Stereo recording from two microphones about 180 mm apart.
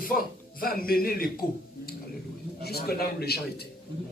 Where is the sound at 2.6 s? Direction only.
60° left (ahead or behind).